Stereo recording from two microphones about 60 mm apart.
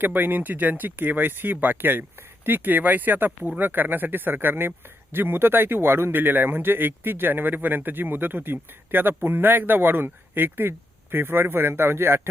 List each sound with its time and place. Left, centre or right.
0.0 s speech: right